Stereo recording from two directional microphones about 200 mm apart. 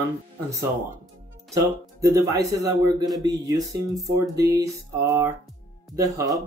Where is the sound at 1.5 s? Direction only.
15° right (ahead or behind).